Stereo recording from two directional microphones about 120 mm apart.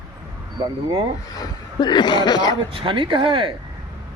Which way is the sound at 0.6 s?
45° right (ahead or behind).